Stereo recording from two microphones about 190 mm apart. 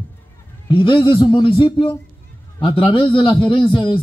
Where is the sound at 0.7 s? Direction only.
25° left (ahead or behind).